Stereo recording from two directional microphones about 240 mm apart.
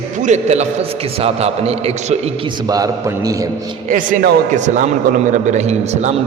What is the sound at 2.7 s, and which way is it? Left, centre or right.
Speech, centre.